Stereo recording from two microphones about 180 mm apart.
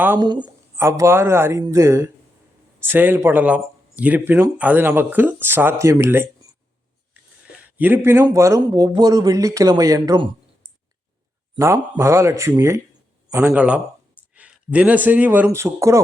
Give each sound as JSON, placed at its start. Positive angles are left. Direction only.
{"t": 0.0, "sound": "speech", "side_deg": -10}
{"t": 7.6, "sound": "a man's voice", "side_deg": -10}
{"t": 11.6, "sound": "a man's voice", "side_deg": -15}